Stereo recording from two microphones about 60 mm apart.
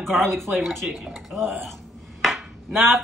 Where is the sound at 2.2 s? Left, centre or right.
Centre.